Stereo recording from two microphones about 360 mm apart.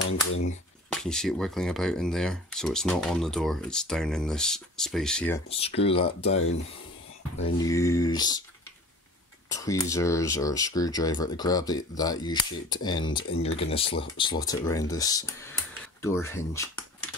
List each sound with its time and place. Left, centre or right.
0.0 s typewriter: left
0.9 s speech: centre
5.5 s speech: centre
9.5 s speech: centre